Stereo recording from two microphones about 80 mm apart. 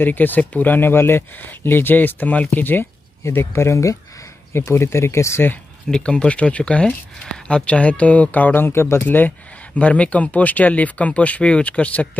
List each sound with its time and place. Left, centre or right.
0.0 s speech: left
5.9 s speech: centre